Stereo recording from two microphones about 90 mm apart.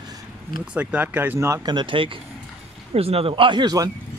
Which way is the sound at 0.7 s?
15° right (ahead or behind).